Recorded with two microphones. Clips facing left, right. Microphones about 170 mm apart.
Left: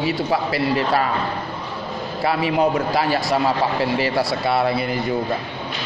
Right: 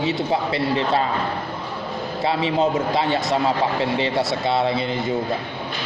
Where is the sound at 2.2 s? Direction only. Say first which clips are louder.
Left 1 dB; 25° right (ahead or behind).